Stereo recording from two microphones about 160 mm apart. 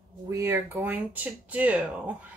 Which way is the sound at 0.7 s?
5° right (ahead or behind).